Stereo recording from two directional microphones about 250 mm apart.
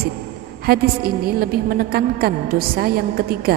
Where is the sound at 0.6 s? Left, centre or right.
Right.